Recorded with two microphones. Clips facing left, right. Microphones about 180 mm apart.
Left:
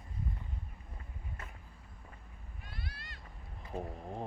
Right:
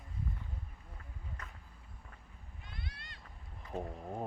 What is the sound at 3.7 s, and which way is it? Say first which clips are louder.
Speech: even; 5° right (ahead or behind).